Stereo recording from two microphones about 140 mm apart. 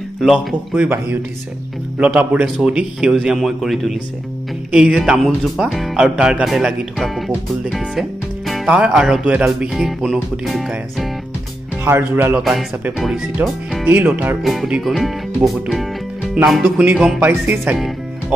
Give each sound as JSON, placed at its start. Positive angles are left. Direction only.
{"t": 0.2, "sound": "speech", "side_deg": -5}
{"t": 0.8, "sound": "music", "side_deg": -15}
{"t": 2.0, "sound": "speech", "side_deg": -10}
{"t": 11.8, "sound": "music", "side_deg": -15}
{"t": 12.9, "sound": "speech", "side_deg": 0}
{"t": 13.4, "sound": "music", "side_deg": -10}
{"t": 14.4, "sound": "speech", "side_deg": 0}
{"t": 16.3, "sound": "music", "side_deg": -5}